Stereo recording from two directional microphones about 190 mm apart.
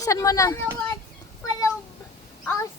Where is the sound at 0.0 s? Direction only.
15° left (ahead or behind).